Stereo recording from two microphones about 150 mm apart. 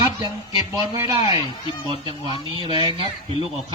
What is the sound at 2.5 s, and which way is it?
Speech, 35° right (ahead or behind).